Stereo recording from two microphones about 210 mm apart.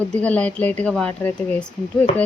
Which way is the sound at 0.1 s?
5° left (ahead or behind).